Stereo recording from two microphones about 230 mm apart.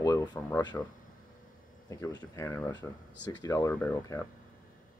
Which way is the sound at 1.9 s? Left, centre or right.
Centre.